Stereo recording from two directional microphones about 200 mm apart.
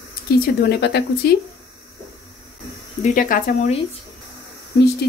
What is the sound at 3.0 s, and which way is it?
Speech, 40° left (ahead or behind).